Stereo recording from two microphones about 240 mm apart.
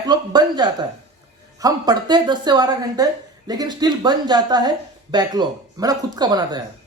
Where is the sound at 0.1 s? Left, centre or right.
Centre.